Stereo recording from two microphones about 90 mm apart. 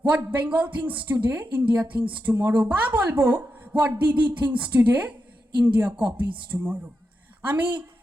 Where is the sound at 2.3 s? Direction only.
30° right (ahead or behind).